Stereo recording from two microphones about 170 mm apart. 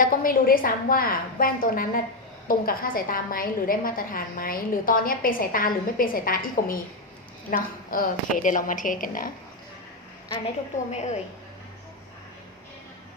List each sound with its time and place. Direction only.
0.0 s a woman's voice: 55° left (ahead or behind)
10.9 s a woman's voice: 40° left (ahead or behind)